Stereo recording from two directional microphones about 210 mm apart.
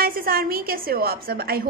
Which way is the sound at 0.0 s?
45° right (ahead or behind).